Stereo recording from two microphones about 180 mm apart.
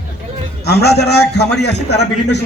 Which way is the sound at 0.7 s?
65° left (ahead or behind).